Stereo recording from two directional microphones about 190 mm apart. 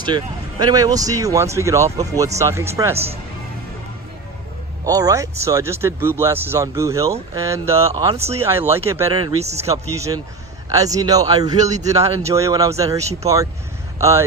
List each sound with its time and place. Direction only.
0.1 s speech: 25° right (ahead or behind)
2.9 s speech: 30° right (ahead or behind)
4.9 s speech: 20° right (ahead or behind)
9.4 s speech: 35° right (ahead or behind)
9.7 s speech: 15° right (ahead or behind)